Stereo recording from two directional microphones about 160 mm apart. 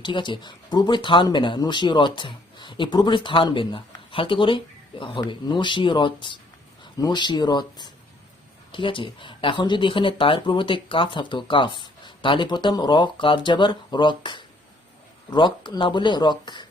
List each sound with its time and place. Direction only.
0.0 s speech: 30° left (ahead or behind)